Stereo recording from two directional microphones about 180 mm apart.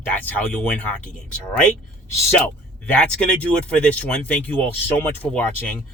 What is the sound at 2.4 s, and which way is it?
Speech, 5° left (ahead or behind).